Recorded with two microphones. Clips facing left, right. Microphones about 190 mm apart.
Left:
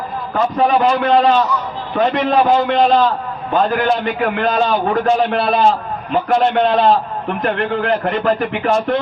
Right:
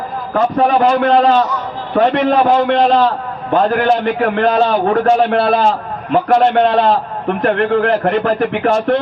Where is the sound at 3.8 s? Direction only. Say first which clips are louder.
Right 3 dB; 60° right (ahead or behind).